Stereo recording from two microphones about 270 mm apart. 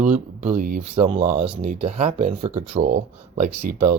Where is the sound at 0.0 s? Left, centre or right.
Right.